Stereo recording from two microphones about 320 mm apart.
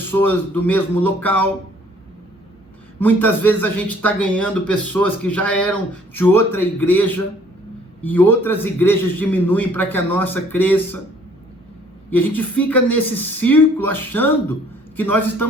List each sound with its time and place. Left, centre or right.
0.0 s speech: centre
3.0 s a man's voice: centre
12.1 s a man's voice: centre